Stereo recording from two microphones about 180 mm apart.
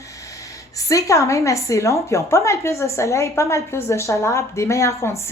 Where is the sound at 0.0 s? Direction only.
20° left (ahead or behind).